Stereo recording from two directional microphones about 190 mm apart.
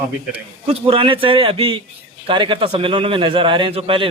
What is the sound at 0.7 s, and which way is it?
A man's voice, 30° right (ahead or behind).